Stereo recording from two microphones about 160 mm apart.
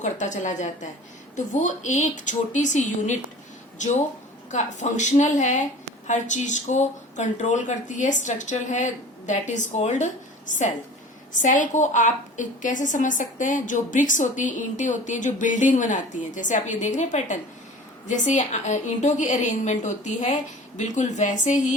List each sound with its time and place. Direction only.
0.0 s a woman's voice: 50° left (ahead or behind)